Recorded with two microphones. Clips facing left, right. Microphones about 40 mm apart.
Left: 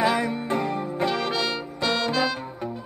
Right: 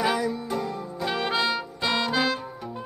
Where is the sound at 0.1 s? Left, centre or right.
Left.